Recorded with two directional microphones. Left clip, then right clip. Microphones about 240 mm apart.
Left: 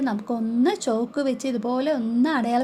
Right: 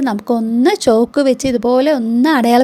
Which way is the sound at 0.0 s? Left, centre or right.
Right.